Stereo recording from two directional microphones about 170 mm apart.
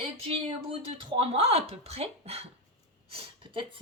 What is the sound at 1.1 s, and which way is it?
Speech, 35° right (ahead or behind).